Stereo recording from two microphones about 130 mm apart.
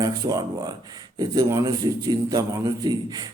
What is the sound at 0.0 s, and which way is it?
A man's voice, 30° right (ahead or behind).